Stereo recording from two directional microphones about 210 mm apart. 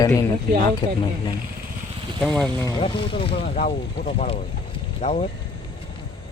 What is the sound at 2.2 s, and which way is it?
Speech, 5° left (ahead or behind).